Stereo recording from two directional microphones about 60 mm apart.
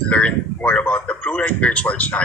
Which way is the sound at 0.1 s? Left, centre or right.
Left.